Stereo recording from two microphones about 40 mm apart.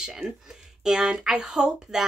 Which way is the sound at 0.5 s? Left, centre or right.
Centre.